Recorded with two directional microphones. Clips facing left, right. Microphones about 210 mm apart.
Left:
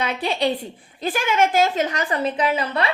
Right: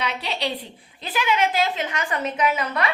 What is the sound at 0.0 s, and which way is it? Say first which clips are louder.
A woman's voice: left 5 dB; 45° left (ahead or behind).